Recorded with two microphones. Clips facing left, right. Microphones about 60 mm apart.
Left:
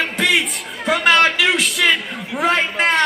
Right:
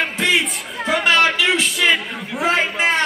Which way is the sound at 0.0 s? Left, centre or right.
Centre.